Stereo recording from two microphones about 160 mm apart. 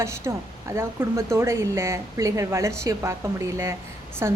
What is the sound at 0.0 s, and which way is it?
A woman's voice, 20° right (ahead or behind).